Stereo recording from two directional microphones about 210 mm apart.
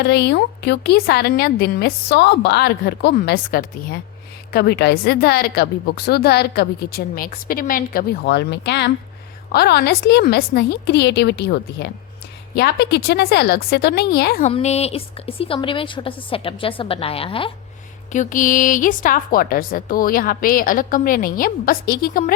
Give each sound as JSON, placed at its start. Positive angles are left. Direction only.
{"t": 0.0, "sound": "speech", "side_deg": 50}
{"t": 14.4, "sound": "a woman's voice", "side_deg": 30}
{"t": 18.1, "sound": "a woman's voice", "side_deg": 35}